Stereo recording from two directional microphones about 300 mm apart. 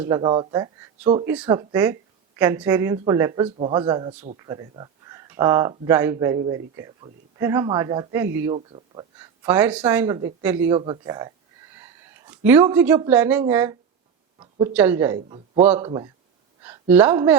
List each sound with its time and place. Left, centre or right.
0.0 s speech: centre
14.3 s a sound: centre
14.7 s speech: centre